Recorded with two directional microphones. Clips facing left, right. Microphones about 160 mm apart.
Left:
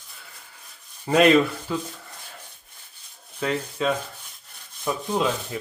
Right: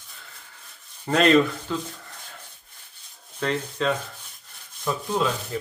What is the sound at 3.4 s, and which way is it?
Speech, 5° left (ahead or behind).